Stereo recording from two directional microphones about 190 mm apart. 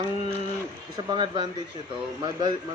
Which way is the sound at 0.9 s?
25° right (ahead or behind).